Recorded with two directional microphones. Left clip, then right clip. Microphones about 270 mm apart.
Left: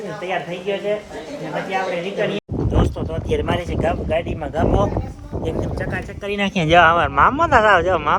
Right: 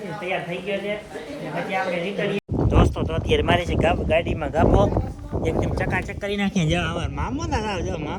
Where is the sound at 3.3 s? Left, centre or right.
Centre.